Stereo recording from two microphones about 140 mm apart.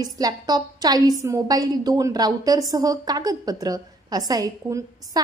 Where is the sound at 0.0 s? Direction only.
25° right (ahead or behind).